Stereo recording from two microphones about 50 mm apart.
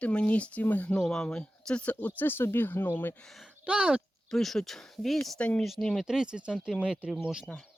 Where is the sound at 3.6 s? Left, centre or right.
Right.